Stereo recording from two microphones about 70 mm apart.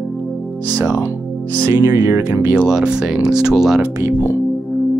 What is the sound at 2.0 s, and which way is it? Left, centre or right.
Speech, right.